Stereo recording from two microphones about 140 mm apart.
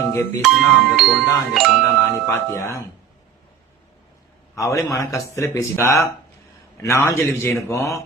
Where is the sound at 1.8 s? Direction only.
20° left (ahead or behind).